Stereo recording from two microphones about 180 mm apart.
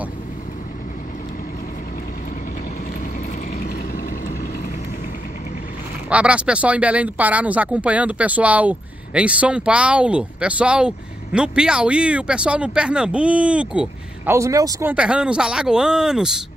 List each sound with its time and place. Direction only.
3.5 s vehicle: 55° left (ahead or behind)
6.0 s speech: 5° right (ahead or behind)